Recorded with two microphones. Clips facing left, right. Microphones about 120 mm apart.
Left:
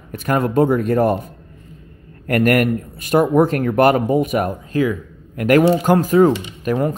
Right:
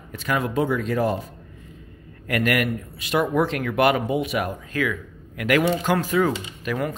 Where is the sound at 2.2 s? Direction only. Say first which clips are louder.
Left 7 dB; 45° left (ahead or behind).